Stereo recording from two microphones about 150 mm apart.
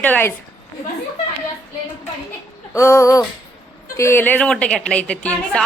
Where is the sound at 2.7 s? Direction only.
20° left (ahead or behind).